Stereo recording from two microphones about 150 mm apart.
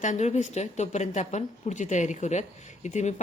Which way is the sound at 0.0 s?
50° left (ahead or behind).